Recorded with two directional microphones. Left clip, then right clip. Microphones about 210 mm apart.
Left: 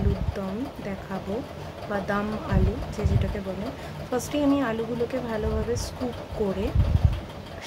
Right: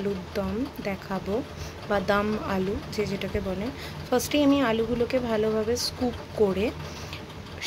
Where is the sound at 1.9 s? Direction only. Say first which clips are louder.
Right 4 dB; 15° right (ahead or behind).